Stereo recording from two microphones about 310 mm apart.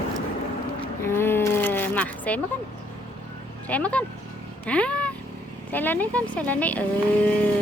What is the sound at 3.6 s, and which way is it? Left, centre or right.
Speech, centre.